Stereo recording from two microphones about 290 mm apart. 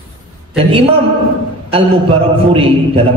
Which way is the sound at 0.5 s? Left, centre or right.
Centre.